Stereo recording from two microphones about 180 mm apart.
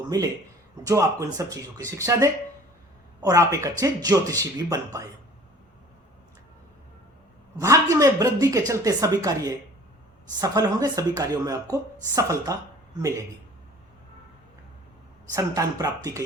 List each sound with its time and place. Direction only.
0.1 s a woman's voice: 20° right (ahead or behind)
7.6 s a woman's voice: 15° right (ahead or behind)
15.3 s a woman's voice: 20° right (ahead or behind)